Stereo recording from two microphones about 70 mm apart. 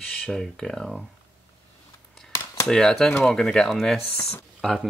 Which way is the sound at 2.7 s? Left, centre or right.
Centre.